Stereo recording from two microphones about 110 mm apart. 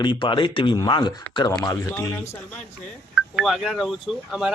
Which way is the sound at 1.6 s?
25° left (ahead or behind).